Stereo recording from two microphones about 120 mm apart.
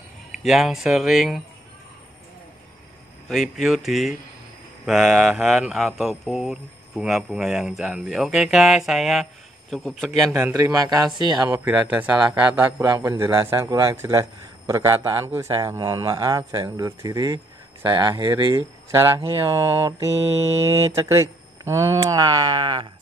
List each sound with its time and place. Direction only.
0.4 s speech: centre (ahead or behind)
3.3 s speech: centre (ahead or behind)
10.5 s speech: 25° right (ahead or behind)
11.6 s speech: 15° right (ahead or behind); by 22.8 s 40° right (ahead or behind)